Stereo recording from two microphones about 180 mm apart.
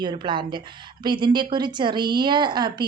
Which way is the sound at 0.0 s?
25° right (ahead or behind).